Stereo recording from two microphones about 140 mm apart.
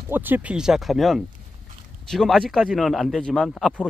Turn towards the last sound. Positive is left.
turn(degrees=5)  # may be behind; listen again after turning